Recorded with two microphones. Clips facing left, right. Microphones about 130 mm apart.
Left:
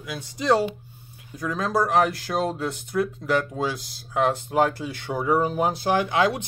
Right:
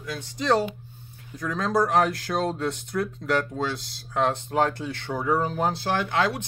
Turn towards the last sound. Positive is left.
turn(degrees=15)  # may be behind; listen again after turning